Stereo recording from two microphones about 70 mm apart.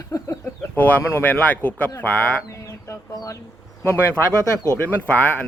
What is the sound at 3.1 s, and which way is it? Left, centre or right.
Speech, left.